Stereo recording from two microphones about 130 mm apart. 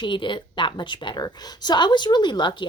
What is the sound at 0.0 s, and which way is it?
A woman's voice, 40° left (ahead or behind).